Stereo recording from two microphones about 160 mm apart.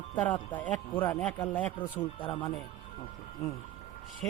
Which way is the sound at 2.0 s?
35° left (ahead or behind).